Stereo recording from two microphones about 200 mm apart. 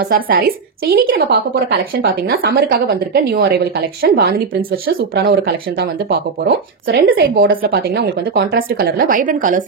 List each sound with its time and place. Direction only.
0.1 s speech: 45° right (ahead or behind)